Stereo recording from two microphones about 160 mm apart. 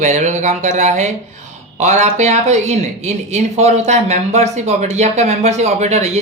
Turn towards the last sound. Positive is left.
turn(degrees=-45)  # may be behind; listen again after turning